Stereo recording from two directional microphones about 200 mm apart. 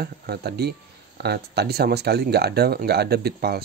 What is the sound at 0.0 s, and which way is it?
Speech, 50° right (ahead or behind).